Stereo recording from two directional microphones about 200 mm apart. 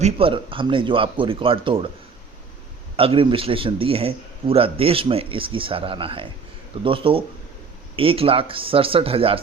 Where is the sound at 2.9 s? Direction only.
25° right (ahead or behind).